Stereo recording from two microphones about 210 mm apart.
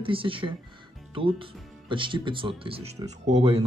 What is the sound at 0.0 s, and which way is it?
Speech, 25° right (ahead or behind).